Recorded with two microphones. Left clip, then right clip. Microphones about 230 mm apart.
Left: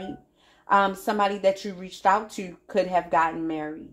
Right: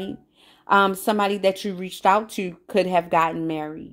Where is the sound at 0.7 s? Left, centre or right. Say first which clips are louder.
Right 3 dB; right.